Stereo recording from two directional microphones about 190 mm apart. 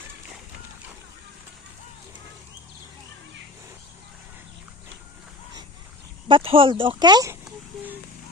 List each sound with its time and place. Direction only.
6.2 s speech: 30° right (ahead or behind)